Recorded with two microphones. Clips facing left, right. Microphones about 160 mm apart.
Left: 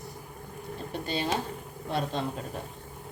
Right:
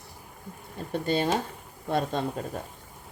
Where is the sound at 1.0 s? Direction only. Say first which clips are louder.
Right 4 dB; 50° right (ahead or behind).